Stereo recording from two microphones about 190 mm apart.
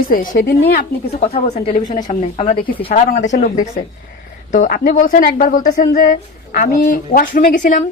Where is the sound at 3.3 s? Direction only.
45° left (ahead or behind).